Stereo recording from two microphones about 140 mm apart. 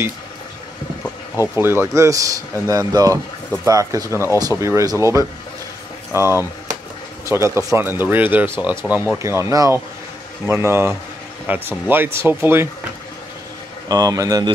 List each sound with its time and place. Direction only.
1.3 s speech: 25° left (ahead or behind)
1.6 s speech: 15° right (ahead or behind)
13.8 s speech: 25° right (ahead or behind)